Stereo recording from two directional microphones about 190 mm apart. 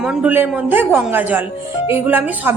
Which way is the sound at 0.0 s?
5° right (ahead or behind).